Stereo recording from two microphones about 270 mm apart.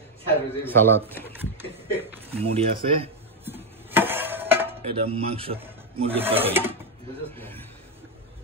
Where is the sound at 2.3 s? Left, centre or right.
Right.